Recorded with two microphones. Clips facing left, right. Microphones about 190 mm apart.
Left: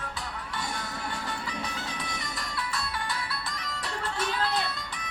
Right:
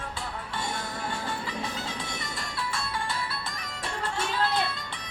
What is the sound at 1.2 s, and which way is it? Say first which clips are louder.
Music: right 2 dB; 25° right (ahead or behind).